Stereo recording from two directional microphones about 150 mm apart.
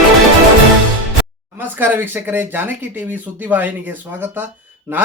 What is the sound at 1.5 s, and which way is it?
Speech, 15° right (ahead or behind).